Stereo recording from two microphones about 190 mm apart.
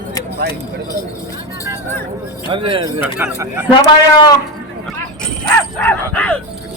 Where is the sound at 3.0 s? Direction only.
10° right (ahead or behind).